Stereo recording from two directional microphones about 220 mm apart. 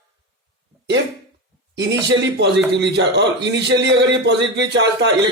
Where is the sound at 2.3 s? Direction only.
50° right (ahead or behind).